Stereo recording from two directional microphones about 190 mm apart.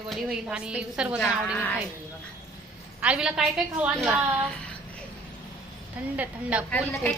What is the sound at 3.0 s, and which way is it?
A woman's voice, 5° right (ahead or behind).